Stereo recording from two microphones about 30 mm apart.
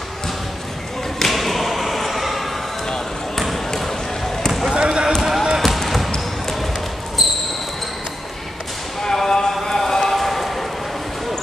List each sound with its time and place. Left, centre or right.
1.2 s thump: centre
4.7 s basketball bounce: right
5.2 s basketball bounce: centre
5.8 s basketball bounce: centre
9.0 s a sound: centre